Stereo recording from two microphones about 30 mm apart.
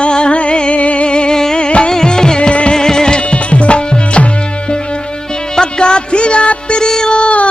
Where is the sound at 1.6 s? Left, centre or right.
Left.